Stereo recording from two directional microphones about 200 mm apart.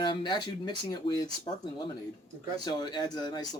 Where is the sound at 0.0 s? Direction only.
20° left (ahead or behind).